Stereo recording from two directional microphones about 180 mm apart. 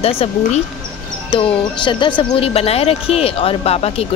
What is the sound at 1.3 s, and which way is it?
A woman's voice, 30° left (ahead or behind).